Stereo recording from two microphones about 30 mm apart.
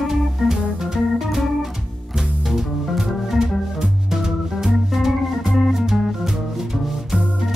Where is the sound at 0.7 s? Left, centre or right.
Centre.